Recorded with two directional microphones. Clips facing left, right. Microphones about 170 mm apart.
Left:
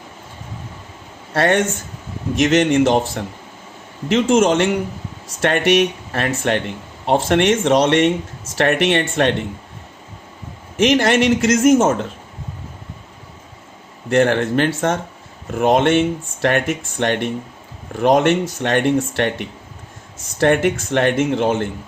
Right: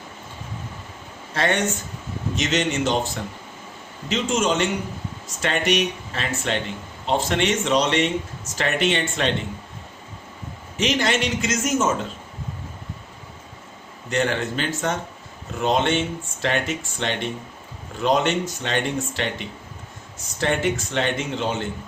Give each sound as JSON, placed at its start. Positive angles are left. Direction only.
{"t": 1.3, "sound": "speech", "side_deg": 55}
{"t": 4.1, "sound": "speech", "side_deg": 55}
{"t": 10.8, "sound": "speech", "side_deg": 65}
{"t": 14.1, "sound": "speech", "side_deg": 60}